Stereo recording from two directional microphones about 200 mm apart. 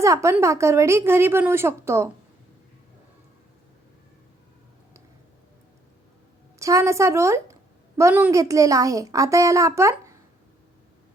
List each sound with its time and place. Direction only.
0.0 s a woman's voice: 15° right (ahead or behind)
6.6 s a woman's voice: 15° right (ahead or behind)